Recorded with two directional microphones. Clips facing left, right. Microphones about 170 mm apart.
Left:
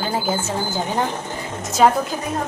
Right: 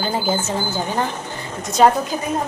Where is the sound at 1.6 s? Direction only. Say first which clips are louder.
Right 2 dB; 5° left (ahead or behind).